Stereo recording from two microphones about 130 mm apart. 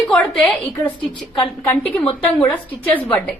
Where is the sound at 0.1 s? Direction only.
5° left (ahead or behind).